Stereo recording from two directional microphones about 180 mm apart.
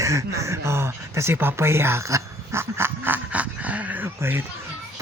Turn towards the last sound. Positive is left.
turn(degrees=-10)  # may be behind; listen again after turning